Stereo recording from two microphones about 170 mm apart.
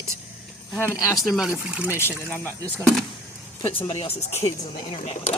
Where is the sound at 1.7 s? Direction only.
5° right (ahead or behind).